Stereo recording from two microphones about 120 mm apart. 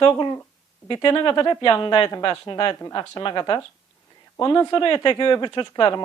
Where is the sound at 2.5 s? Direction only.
40° left (ahead or behind).